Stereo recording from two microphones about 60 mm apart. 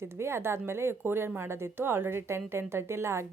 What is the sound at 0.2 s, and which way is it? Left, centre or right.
A woman's voice, right.